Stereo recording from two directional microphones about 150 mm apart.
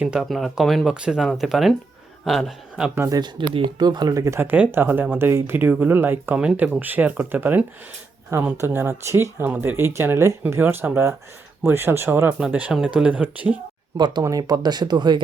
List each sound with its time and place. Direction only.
0.0 s speech: 5° right (ahead or behind)
2.9 s speech: 15° right (ahead or behind)
3.2 s speech: 30° right (ahead or behind); by 13.6 s 10° right (ahead or behind)
13.9 s speech: 30° right (ahead or behind)